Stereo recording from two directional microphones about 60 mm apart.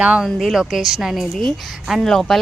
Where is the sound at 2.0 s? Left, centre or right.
Centre.